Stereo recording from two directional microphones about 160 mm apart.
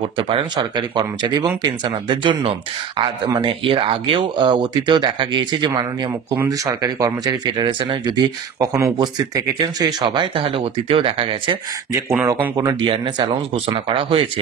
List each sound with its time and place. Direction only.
0.3 s speech: 30° right (ahead or behind)
6.3 s speech: 15° right (ahead or behind)
12.1 s speech: 15° right (ahead or behind)
12.5 s speech: 25° right (ahead or behind)